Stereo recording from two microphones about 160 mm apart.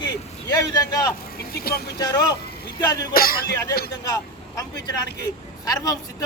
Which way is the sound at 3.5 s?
20° left (ahead or behind).